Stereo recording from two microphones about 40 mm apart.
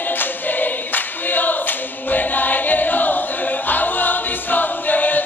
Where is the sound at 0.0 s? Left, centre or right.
Left.